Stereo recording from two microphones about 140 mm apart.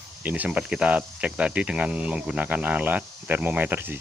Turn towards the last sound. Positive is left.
turn(degrees=-15)  # may be behind; listen again after turning